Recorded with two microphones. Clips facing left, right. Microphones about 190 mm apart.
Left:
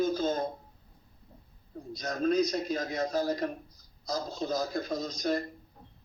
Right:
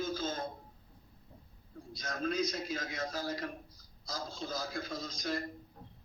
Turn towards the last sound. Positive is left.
turn(degrees=40)  # may be behind; listen again after turning